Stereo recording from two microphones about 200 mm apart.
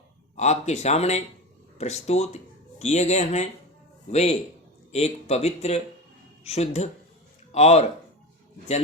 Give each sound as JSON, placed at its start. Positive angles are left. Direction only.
{"t": 0.3, "sound": "speech", "side_deg": 35}